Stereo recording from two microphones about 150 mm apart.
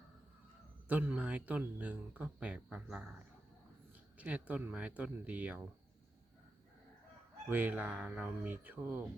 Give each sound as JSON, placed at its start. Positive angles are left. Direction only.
{"t": 0.9, "sound": "speech", "side_deg": -10}
{"t": 4.2, "sound": "speech", "side_deg": -10}
{"t": 7.5, "sound": "speech", "side_deg": -10}